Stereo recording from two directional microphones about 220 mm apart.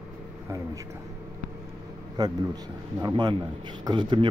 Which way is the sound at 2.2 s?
20° right (ahead or behind).